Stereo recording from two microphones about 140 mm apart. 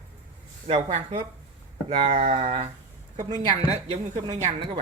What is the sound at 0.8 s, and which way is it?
Speech, 50° right (ahead or behind).